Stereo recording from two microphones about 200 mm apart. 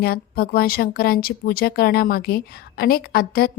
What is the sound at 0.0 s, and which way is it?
Speech, 50° left (ahead or behind).